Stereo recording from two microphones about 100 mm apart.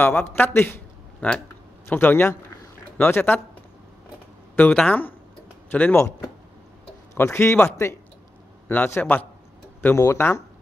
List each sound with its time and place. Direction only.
0.0 s a man's voice: 20° left (ahead or behind)
4.7 s a man's voice: 15° left (ahead or behind)
7.2 s a man's voice: 25° left (ahead or behind)